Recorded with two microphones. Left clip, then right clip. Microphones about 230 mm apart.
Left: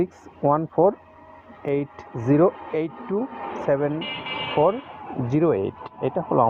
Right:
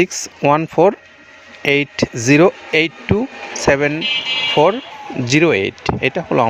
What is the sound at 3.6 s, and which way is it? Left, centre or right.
Speech, right.